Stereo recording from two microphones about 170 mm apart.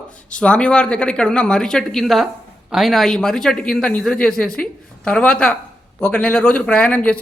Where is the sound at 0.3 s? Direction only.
5° left (ahead or behind).